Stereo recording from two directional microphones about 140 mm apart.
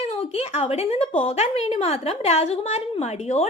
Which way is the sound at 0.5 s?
45° left (ahead or behind).